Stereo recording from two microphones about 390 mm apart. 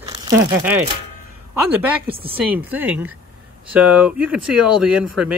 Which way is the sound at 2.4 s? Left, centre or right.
Centre.